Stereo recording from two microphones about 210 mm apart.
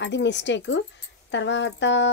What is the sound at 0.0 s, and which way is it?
Speech, 55° left (ahead or behind).